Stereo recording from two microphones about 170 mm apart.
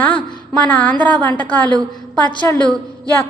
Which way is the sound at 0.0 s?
10° left (ahead or behind).